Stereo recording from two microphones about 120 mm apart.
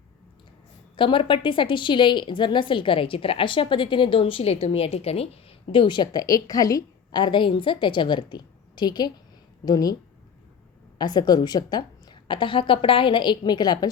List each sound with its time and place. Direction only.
0.9 s a woman's voice: 45° left (ahead or behind)
10.9 s a woman's voice: 35° left (ahead or behind)